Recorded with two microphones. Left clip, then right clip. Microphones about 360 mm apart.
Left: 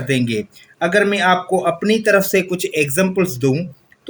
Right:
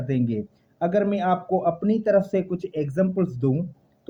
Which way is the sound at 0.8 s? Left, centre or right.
Right.